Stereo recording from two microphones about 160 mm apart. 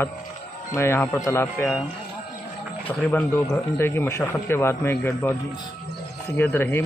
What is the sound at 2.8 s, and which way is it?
A man's voice, 10° left (ahead or behind).